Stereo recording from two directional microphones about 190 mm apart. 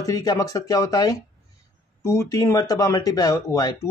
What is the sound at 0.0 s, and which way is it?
Speech, 20° left (ahead or behind).